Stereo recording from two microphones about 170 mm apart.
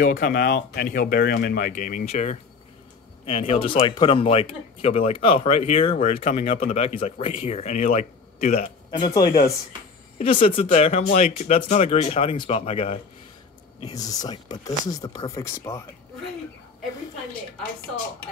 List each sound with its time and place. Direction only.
0.0 s speech: 75° left (ahead or behind); by 8.6 s 40° left (ahead or behind)
8.9 s speech: 25° left (ahead or behind)
10.1 s speech: 35° left (ahead or behind)
13.8 s speech: 20° left (ahead or behind)